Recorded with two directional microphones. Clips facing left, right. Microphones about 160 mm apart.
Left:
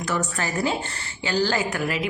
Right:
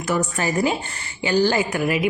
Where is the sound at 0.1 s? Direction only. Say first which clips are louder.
Right 5 dB; 15° right (ahead or behind).